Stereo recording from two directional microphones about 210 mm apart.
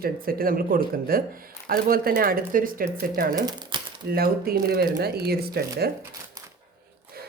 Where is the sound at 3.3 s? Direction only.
20° right (ahead or behind).